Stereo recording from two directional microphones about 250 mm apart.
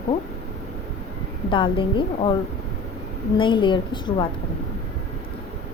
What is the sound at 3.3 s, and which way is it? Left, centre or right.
Speech, centre.